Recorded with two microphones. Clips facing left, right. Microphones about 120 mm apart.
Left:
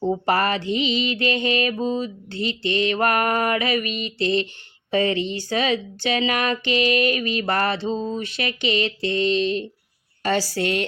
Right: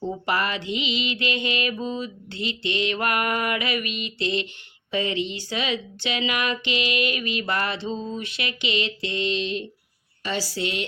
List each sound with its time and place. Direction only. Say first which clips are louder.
0.1 s a woman's voice: left 5 dB; 40° left (ahead or behind)